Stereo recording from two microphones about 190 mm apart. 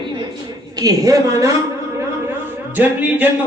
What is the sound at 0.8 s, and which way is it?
Speech, 20° right (ahead or behind).